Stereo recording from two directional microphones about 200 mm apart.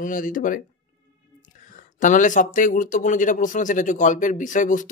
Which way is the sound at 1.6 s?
40° left (ahead or behind).